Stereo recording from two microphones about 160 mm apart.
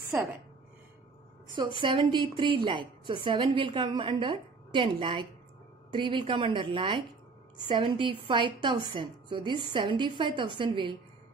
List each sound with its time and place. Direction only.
1.8 s a woman's voice: 30° right (ahead or behind)